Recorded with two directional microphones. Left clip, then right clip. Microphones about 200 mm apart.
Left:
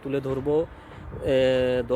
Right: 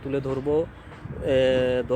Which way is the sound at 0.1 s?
5° left (ahead or behind).